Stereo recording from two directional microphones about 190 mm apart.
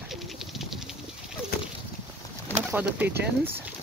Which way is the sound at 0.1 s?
Centre (ahead or behind).